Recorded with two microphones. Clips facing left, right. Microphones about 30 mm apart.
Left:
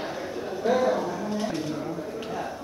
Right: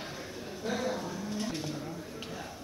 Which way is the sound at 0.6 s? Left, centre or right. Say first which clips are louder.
Left 11 dB; centre.